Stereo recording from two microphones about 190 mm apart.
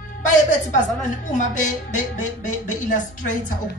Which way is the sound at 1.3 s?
40° left (ahead or behind).